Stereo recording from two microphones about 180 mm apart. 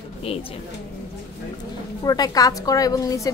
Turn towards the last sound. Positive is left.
turn(degrees=20)  # may be behind; listen again after turning